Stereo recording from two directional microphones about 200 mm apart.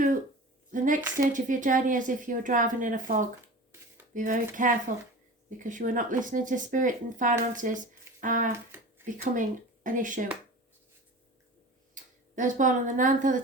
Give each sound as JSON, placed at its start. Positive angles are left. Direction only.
{"t": 0.7, "sound": "speech", "side_deg": -40}
{"t": 4.1, "sound": "a sound", "side_deg": -40}
{"t": 4.5, "sound": "speech", "side_deg": -40}
{"t": 11.9, "sound": "speech", "side_deg": -40}